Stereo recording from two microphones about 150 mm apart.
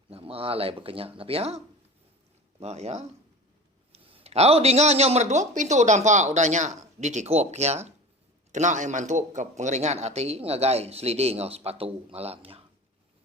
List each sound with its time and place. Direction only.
0.1 s a man's voice: 40° right (ahead or behind)